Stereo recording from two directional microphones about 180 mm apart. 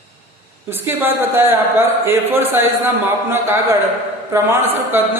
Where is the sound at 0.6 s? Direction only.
10° right (ahead or behind).